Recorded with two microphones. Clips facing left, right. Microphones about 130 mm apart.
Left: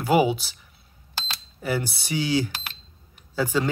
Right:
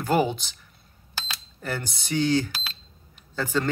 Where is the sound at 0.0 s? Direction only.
10° left (ahead or behind).